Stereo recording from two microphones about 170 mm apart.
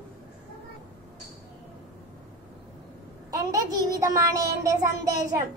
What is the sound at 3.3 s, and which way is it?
A child's voice, 20° right (ahead or behind).